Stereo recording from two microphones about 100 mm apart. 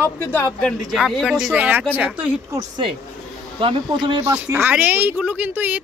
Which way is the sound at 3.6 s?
60° right (ahead or behind).